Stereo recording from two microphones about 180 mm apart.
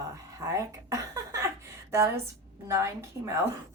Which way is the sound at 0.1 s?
15° right (ahead or behind).